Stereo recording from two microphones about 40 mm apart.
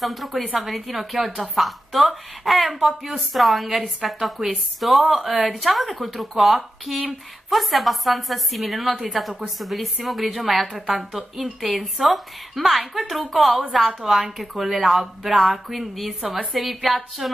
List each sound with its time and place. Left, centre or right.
0.0 s a woman's voice: centre